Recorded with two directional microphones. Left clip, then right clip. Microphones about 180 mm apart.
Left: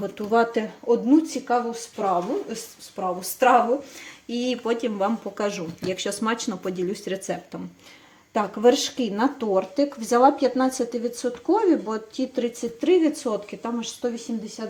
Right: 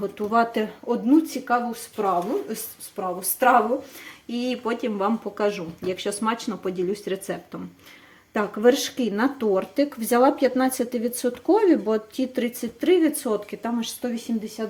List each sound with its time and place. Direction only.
0.0 s speech: centre (ahead or behind); by 14.6 s 20° right (ahead or behind)